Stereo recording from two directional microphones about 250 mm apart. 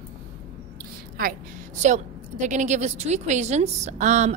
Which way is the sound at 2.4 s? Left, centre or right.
Right.